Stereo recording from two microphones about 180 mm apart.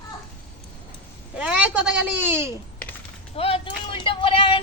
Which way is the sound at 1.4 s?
5° right (ahead or behind).